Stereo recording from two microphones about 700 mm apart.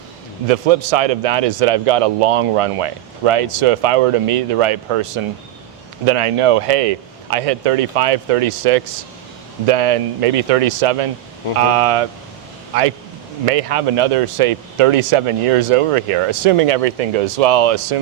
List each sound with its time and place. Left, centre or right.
0.4 s a man's voice: right
13.4 s a man's voice: right